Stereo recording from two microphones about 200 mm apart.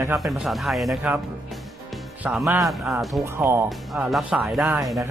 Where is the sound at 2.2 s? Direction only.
5° right (ahead or behind).